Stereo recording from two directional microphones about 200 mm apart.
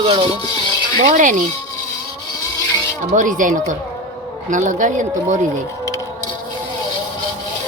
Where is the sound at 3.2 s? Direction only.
40° right (ahead or behind).